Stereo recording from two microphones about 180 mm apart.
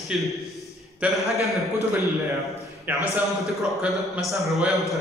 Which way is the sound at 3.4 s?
Centre (ahead or behind).